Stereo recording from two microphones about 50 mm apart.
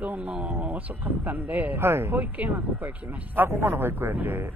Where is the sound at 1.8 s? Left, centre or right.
Right.